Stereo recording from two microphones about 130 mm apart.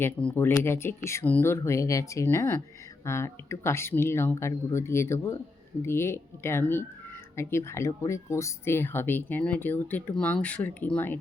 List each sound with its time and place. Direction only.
0.0 s speech: 10° left (ahead or behind)